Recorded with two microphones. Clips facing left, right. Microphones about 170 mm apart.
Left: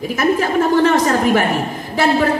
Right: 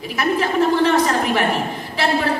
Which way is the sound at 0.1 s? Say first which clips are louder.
Left 3 dB; 45° left (ahead or behind).